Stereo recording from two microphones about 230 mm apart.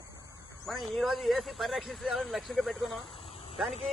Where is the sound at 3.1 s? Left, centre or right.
Left.